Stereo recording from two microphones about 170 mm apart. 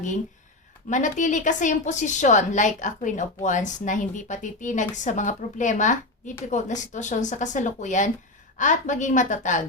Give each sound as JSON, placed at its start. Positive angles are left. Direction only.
{"t": 0.9, "sound": "a woman's voice", "side_deg": 45}